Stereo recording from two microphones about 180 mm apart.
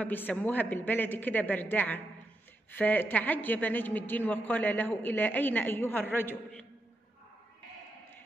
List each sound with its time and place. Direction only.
0.0 s a woman's voice: 10° left (ahead or behind)